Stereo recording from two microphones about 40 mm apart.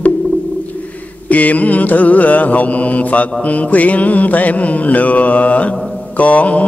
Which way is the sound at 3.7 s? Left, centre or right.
Left.